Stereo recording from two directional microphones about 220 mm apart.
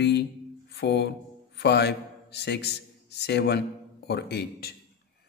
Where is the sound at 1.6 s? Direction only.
50° left (ahead or behind).